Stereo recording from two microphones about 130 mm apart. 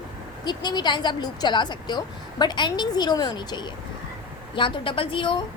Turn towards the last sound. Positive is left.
turn(degrees=40)  # may be behind; listen again after turning